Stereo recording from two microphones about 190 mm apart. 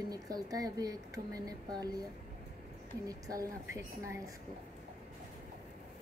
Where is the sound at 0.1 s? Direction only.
20° right (ahead or behind).